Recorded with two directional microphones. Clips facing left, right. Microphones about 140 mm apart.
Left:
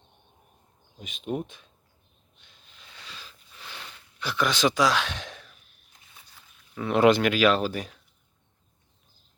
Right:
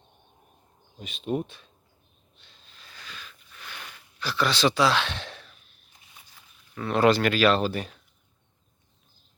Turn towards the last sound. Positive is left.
turn(degrees=5)  # may be behind; listen again after turning